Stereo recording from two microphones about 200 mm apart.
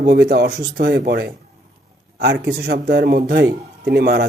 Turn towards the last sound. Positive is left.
turn(degrees=-50)  # may be behind; listen again after turning